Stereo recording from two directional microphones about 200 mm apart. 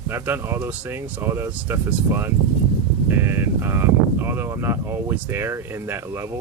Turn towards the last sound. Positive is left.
turn(degrees=-10)  # may be behind; listen again after turning